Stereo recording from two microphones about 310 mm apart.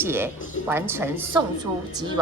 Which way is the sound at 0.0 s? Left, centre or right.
Centre.